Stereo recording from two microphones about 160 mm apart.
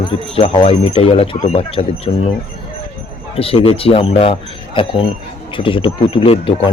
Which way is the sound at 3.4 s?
35° left (ahead or behind).